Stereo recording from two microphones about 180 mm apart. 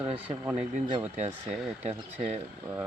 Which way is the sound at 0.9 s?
35° right (ahead or behind).